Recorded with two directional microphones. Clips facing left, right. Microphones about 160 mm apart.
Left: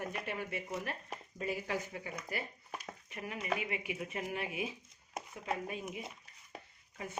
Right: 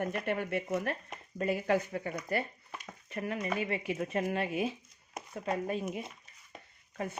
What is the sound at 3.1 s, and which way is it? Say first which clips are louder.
Speech: right 8 dB; 45° right (ahead or behind).